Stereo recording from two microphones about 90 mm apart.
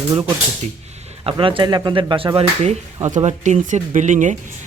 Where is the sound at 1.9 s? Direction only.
75° right (ahead or behind).